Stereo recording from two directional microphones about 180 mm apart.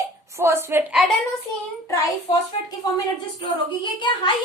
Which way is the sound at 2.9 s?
25° left (ahead or behind).